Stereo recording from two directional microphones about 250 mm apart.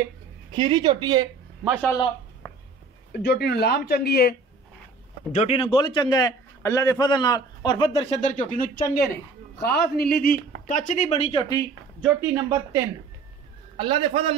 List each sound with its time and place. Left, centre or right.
0.5 s speech: centre
1.8 s speech: centre
3.1 s speech: left
5.3 s a man's voice: left
12.0 s speech: centre
13.7 s a man's voice: right